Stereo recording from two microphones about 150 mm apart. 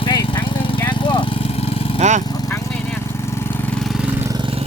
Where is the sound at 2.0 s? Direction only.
50° right (ahead or behind).